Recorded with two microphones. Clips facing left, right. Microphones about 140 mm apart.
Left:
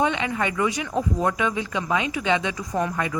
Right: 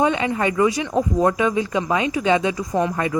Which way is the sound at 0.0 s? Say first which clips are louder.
Right 4 dB; 35° right (ahead or behind).